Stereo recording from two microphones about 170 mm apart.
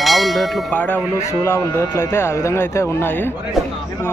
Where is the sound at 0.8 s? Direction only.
15° left (ahead or behind).